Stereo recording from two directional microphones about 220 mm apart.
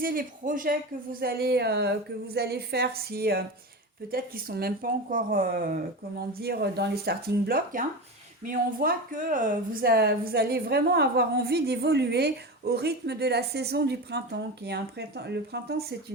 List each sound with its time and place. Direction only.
0.0 s speech: 40° right (ahead or behind)